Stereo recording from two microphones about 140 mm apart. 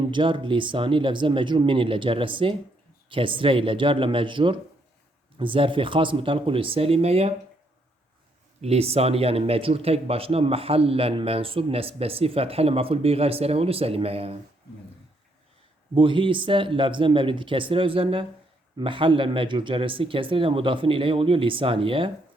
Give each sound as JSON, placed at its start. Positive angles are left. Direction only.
{"t": 0.0, "sound": "speech", "side_deg": -35}
{"t": 8.6, "sound": "speech", "side_deg": -45}
{"t": 16.0, "sound": "speech", "side_deg": -35}